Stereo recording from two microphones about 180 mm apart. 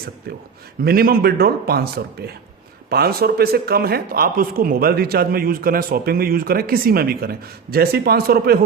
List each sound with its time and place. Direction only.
0.3 s speech: 60° right (ahead or behind)